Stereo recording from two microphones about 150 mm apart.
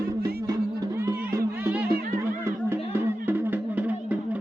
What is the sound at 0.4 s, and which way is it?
Music, 25° right (ahead or behind).